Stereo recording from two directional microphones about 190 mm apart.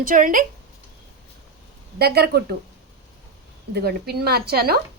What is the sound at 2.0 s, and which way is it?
Speech, 55° right (ahead or behind).